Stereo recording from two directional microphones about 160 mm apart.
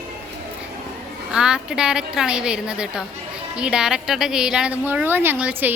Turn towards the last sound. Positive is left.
turn(degrees=-10)  # may be behind; listen again after turning